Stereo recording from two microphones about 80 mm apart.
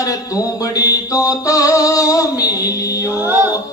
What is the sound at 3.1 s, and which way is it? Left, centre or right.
Chant, right.